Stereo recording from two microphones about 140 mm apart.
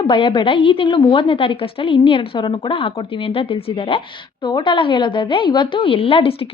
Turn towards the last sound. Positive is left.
turn(degrees=40)  # may be behind; listen again after turning